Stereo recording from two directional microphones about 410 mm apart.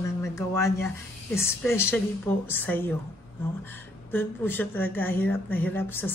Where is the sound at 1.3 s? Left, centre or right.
Centre.